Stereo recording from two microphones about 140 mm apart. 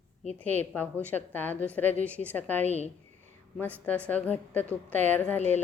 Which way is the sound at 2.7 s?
50° left (ahead or behind).